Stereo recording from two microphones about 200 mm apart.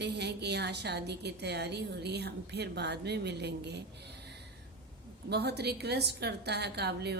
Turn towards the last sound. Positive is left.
turn(degrees=-55)  # may be behind; listen again after turning